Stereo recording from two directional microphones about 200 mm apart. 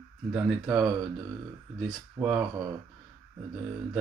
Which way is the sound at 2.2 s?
20° right (ahead or behind).